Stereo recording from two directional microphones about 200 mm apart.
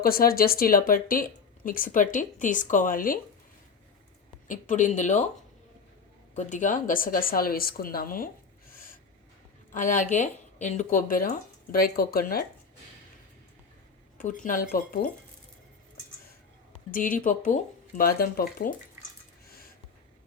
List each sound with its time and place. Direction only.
0.0 s speech: 50° left (ahead or behind)
4.4 s speech: 40° left (ahead or behind)
6.3 s a woman's voice: 35° left (ahead or behind)
14.2 s speech: 40° left (ahead or behind)
16.9 s speech: 45° left (ahead or behind)